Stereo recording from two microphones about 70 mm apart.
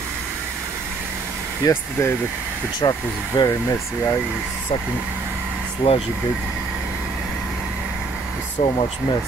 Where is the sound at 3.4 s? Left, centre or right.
Left.